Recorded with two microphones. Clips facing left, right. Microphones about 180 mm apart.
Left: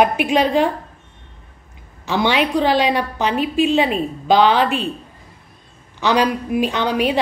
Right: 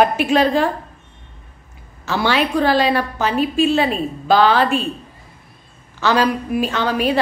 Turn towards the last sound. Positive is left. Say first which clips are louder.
# even
turn(degrees=15)  # may be behind; listen again after turning